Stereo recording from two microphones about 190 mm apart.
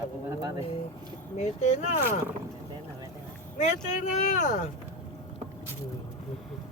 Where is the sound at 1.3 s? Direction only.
40° left (ahead or behind).